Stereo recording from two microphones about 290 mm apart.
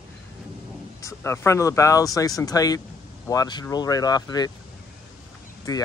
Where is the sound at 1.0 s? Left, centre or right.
Centre.